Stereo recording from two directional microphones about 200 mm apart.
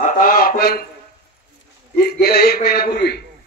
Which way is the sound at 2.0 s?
50° left (ahead or behind).